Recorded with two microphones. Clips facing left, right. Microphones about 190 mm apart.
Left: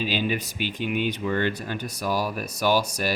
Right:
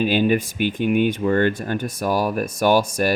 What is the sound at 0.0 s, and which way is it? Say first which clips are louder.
Speech: right 8 dB; 50° right (ahead or behind).